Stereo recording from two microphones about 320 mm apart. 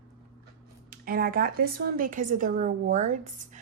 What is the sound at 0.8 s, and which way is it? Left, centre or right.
A woman's voice, right.